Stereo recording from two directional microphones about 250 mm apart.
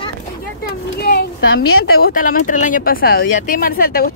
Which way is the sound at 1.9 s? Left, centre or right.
Left.